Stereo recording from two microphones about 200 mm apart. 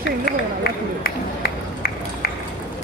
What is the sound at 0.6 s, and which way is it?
Speech, 50° left (ahead or behind).